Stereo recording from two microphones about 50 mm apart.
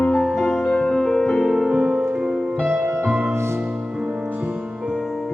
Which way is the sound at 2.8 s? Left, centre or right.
Right.